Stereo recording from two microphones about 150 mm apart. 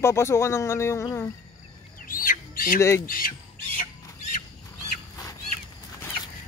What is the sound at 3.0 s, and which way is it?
Speech, 70° left (ahead or behind).